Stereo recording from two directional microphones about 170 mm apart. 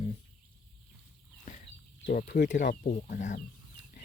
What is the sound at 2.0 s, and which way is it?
Speech, 55° left (ahead or behind).